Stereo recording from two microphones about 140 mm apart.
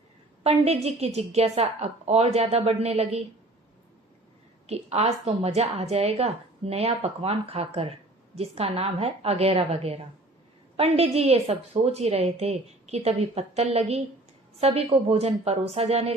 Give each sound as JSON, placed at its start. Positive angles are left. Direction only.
{"t": 0.4, "sound": "a woman's voice", "side_deg": -50}
{"t": 4.6, "sound": "a woman's voice", "side_deg": -50}